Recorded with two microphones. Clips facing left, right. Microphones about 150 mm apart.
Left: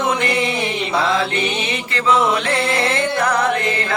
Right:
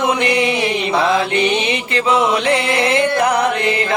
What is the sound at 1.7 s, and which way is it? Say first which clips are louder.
Music: right 2 dB; 20° right (ahead or behind).